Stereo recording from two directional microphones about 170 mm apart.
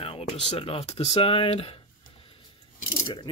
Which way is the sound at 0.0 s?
35° left (ahead or behind).